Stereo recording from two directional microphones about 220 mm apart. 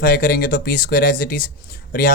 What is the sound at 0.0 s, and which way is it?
Speech, 40° left (ahead or behind).